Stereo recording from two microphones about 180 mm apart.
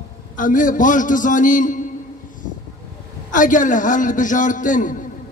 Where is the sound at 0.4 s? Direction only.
45° left (ahead or behind).